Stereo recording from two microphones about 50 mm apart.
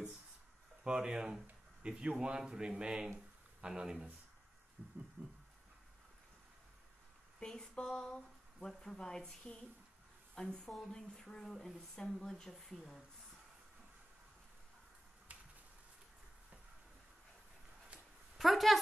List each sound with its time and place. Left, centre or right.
0.8 s speech: centre
4.8 s a sound: right
7.3 s a woman's voice: centre
12.4 s speech: centre
18.4 s a woman's voice: centre